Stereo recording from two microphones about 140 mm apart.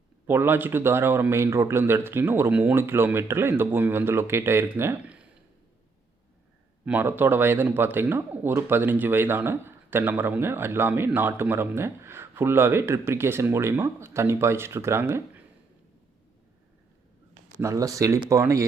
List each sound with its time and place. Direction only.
0.3 s speech: 15° right (ahead or behind)
6.8 s speech: 15° right (ahead or behind)
17.6 s speech: 25° right (ahead or behind)